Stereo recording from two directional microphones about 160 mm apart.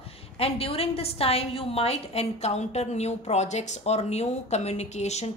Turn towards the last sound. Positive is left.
turn(degrees=45)  # may be behind; listen again after turning